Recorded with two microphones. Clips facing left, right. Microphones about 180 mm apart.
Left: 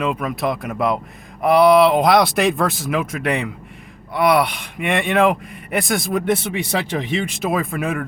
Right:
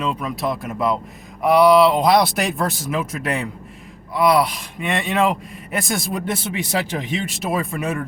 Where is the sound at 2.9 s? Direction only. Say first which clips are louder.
Left 2 dB; 55° left (ahead or behind).